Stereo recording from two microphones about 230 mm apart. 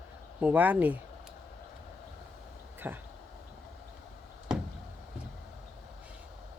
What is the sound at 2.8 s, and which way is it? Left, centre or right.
Speech, centre.